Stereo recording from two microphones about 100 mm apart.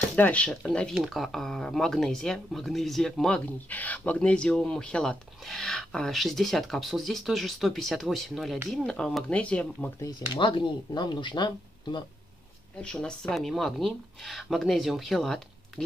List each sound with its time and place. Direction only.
0.1 s speech: 10° left (ahead or behind)
10.3 s speech: 50° left (ahead or behind)
12.7 s speech: 10° left (ahead or behind)